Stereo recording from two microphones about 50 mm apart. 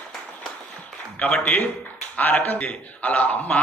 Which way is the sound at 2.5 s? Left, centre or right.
Left.